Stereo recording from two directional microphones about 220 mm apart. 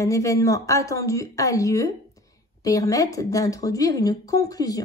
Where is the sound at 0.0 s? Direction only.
15° left (ahead or behind).